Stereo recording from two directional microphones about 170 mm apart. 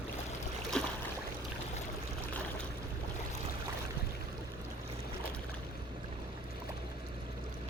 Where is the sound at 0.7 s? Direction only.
5° left (ahead or behind).